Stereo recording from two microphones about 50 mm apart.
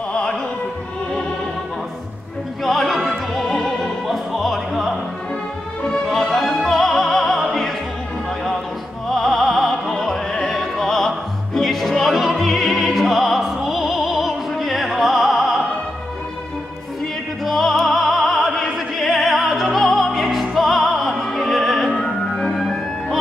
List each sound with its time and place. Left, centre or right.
0.1 s music: centre
2.6 s opera: centre
6.0 s opera: centre
9.1 s music: centre
10.4 s opera: centre
17.5 s music: centre